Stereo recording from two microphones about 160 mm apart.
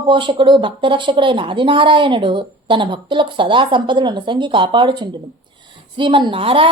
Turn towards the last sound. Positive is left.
turn(degrees=-35)  # may be behind; listen again after turning